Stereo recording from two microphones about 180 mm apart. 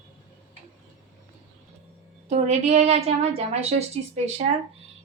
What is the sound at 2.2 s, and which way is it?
A woman's voice, 40° right (ahead or behind).